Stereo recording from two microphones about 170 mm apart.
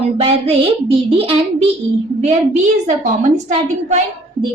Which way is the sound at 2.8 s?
45° right (ahead or behind).